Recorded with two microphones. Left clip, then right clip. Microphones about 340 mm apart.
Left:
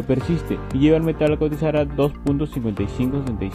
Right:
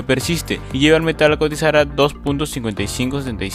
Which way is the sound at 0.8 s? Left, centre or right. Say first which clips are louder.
Right 5 dB; right.